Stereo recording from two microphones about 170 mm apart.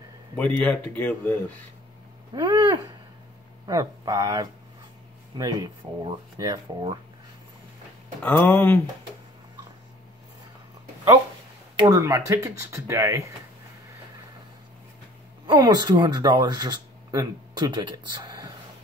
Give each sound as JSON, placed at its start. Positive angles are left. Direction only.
{"t": 0.4, "sound": "speech", "side_deg": 10}
{"t": 2.3, "sound": "speech", "side_deg": -25}
{"t": 8.2, "sound": "speech", "side_deg": 10}
{"t": 11.7, "sound": "speech", "side_deg": -20}
{"t": 15.4, "sound": "speech", "side_deg": -25}